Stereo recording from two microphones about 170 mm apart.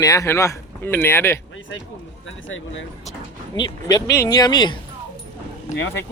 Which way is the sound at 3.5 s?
25° left (ahead or behind).